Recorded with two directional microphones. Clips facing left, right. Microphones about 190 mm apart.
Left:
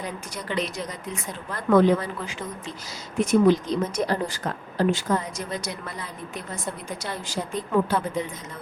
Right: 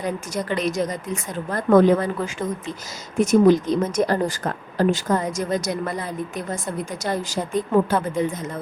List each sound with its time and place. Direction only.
0.0 s a woman's voice: 45° right (ahead or behind)